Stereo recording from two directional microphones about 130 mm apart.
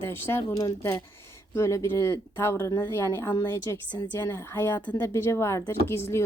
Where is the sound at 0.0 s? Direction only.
20° left (ahead or behind).